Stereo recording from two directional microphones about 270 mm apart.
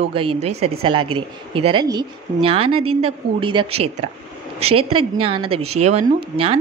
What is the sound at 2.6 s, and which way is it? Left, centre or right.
Speech, right.